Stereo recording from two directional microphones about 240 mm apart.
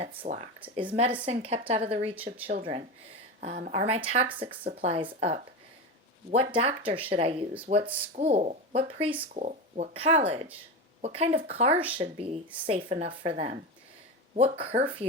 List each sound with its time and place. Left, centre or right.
0.0 s speech: right
2.1 s speech: centre
2.5 s speech: right